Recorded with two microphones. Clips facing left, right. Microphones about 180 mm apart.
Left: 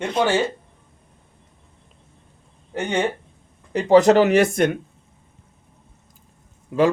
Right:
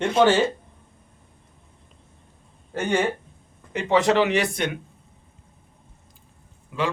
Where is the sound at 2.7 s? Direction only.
20° left (ahead or behind).